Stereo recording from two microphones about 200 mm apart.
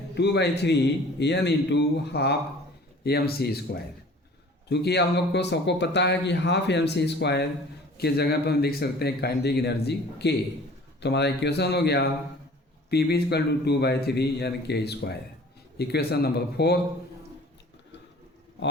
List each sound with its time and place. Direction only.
0.1 s speech: 55° left (ahead or behind)